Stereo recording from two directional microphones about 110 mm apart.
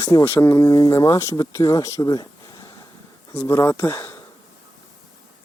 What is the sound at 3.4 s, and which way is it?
Speech, 25° left (ahead or behind).